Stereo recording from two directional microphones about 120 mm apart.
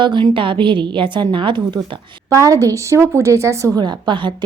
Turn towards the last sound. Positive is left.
turn(degrees=-40)  # may be behind; listen again after turning